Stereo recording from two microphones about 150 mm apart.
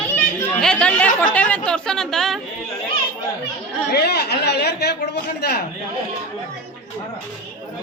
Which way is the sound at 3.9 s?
90° left.